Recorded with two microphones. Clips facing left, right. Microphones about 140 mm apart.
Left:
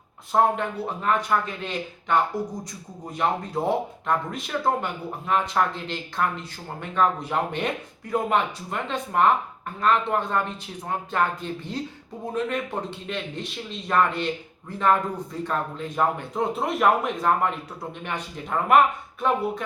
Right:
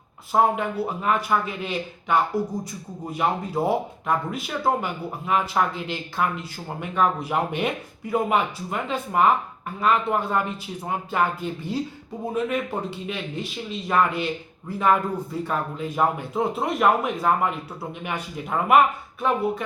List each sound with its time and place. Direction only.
0.3 s speech: 5° right (ahead or behind)